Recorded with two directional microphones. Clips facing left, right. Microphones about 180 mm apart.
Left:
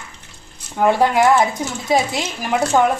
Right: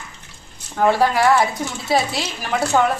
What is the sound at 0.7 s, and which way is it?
Speech, 15° left (ahead or behind).